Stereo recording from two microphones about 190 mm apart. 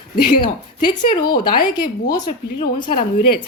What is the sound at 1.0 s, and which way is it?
Speech, 50° left (ahead or behind).